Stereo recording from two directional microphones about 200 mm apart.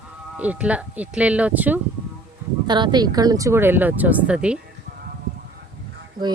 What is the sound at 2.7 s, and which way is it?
Speech, 20° right (ahead or behind).